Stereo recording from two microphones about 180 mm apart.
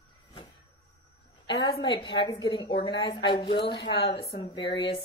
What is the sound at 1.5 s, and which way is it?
Speech, 25° left (ahead or behind).